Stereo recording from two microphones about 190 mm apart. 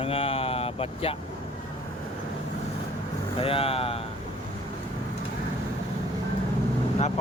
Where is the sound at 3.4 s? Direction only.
30° left (ahead or behind).